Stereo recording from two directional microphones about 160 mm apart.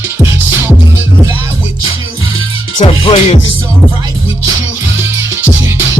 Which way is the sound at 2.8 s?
35° left (ahead or behind).